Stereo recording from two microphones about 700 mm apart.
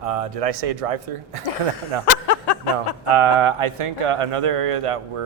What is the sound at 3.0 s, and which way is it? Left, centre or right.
Speech, right.